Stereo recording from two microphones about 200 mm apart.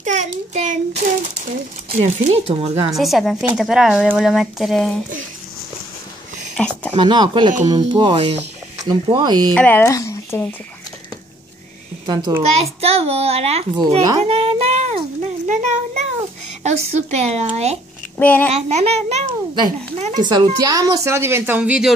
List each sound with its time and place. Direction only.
0.0 s a child's voice: 35° right (ahead or behind)
2.9 s speech: centre (ahead or behind)
6.5 s a sound: 5° left (ahead or behind)
6.9 s speech: 25° right (ahead or behind)
9.5 s speech: 10° left (ahead or behind)
12.1 s a woman's voice: 15° right (ahead or behind)
12.8 s a child's voice: 30° right (ahead or behind)
14.2 s a sound: 30° right (ahead or behind)
16.6 s a child's voice: 35° right (ahead or behind)
18.1 s speech: 10° left (ahead or behind)
18.5 s a child's voice: 30° right (ahead or behind); by 21.9 s 5° right (ahead or behind)